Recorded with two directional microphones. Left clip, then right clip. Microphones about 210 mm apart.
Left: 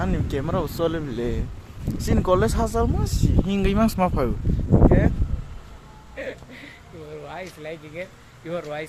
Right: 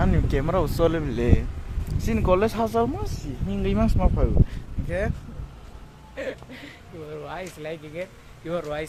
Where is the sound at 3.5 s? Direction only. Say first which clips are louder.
Left 2 dB; 15° left (ahead or behind).